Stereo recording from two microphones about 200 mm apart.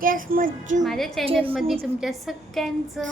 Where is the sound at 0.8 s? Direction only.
Centre (ahead or behind).